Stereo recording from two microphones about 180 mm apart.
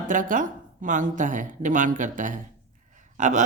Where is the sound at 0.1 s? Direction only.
45° right (ahead or behind).